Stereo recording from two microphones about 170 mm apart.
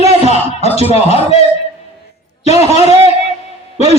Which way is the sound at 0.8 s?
35° left (ahead or behind).